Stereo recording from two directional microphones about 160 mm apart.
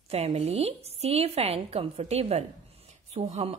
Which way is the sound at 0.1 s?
40° right (ahead or behind).